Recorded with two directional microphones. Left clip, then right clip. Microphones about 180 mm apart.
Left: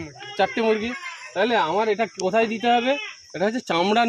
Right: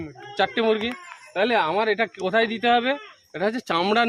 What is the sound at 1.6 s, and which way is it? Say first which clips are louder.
Speech: even; 20° left (ahead or behind).